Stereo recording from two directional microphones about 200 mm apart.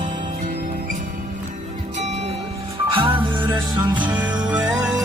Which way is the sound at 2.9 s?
25° right (ahead or behind).